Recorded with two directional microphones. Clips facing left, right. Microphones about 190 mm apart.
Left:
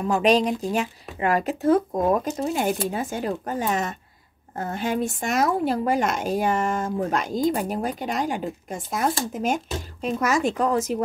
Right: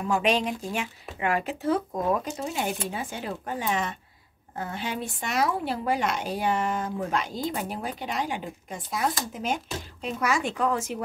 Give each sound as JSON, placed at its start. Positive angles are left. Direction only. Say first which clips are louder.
{"t": 0.1, "sound": "a woman's voice", "louder": "left 5 dB", "side_deg": 40}